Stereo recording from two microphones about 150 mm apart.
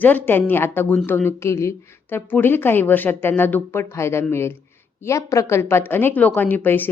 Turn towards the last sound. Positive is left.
turn(degrees=15)  # may be behind; listen again after turning